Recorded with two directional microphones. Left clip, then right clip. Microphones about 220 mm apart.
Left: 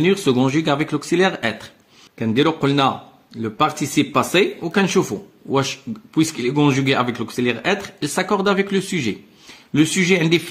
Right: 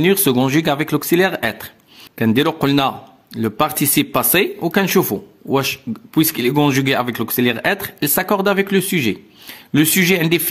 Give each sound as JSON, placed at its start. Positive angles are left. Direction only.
{"t": 0.0, "sound": "speech", "side_deg": -40}